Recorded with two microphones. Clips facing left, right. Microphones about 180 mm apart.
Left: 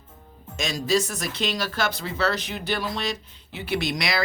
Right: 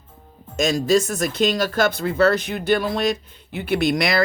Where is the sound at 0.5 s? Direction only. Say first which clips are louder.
Right 6 dB; 45° right (ahead or behind).